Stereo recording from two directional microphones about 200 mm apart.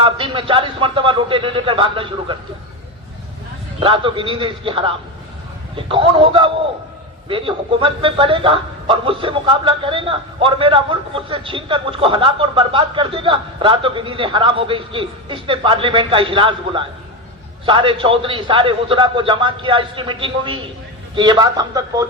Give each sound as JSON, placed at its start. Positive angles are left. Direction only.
{"t": 0.0, "sound": "a man's voice", "side_deg": -25}
{"t": 3.8, "sound": "a man's voice", "side_deg": -25}